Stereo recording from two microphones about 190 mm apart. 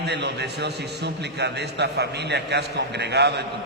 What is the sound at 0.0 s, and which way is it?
A man's voice, 60° right (ahead or behind).